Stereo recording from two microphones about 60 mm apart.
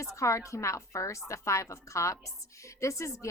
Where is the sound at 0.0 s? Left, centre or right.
Left.